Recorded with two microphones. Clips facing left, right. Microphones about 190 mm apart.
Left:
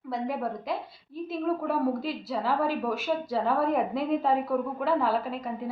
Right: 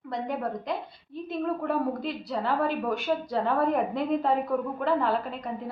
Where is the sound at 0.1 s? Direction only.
5° left (ahead or behind).